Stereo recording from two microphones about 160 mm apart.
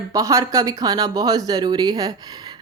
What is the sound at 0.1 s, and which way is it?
Speech, 20° right (ahead or behind).